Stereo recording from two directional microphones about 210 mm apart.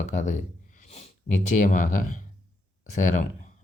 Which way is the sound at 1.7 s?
40° left (ahead or behind).